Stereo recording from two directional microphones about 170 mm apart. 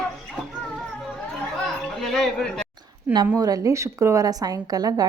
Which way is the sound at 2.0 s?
Centre (ahead or behind).